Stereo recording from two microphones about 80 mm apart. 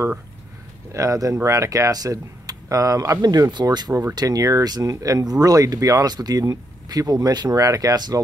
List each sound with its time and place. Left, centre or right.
0.9 s speech: right